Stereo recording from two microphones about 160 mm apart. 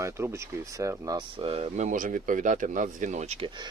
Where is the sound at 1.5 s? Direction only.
35° right (ahead or behind).